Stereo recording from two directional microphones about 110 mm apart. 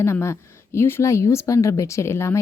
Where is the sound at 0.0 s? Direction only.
25° left (ahead or behind).